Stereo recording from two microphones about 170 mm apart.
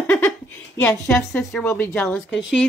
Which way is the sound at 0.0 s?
10° left (ahead or behind).